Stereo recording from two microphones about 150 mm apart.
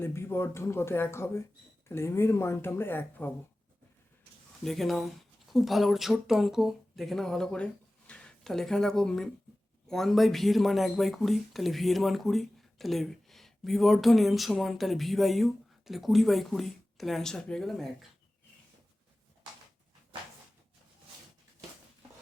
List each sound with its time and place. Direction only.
0.0 s speech: 15° left (ahead or behind)
4.6 s speech: centre (ahead or behind)